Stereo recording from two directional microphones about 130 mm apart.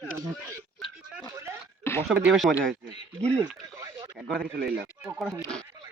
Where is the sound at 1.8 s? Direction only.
20° left (ahead or behind).